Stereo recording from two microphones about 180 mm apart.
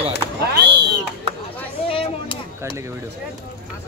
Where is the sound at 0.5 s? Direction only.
70° right (ahead or behind).